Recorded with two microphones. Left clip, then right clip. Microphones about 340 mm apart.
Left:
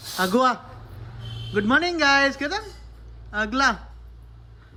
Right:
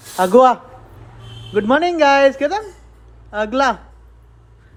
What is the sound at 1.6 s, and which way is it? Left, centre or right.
Speech, centre.